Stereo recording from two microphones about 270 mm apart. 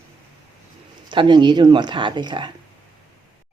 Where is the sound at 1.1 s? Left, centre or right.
Centre.